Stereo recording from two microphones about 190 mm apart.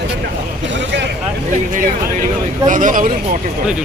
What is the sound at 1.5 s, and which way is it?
Speech, 45° right (ahead or behind).